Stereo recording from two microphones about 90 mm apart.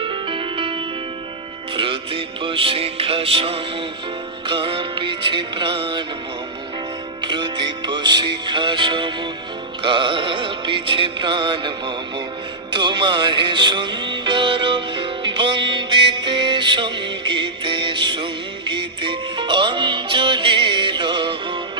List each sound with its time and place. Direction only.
0.0 s music: 70° right (ahead or behind); by 3.6 s 90° right
4.4 s music: 65° right (ahead or behind)
7.2 s music: 55° right (ahead or behind)